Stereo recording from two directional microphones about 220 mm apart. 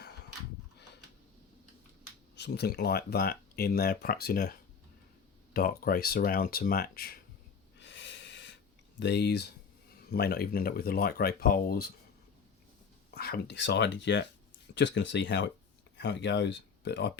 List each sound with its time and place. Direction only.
2.3 s speech: 50° left (ahead or behind)
5.5 s speech: 40° left (ahead or behind)
7.8 s snort: 55° left (ahead or behind)
9.0 s speech: 50° left (ahead or behind)
13.1 s speech: 45° left (ahead or behind)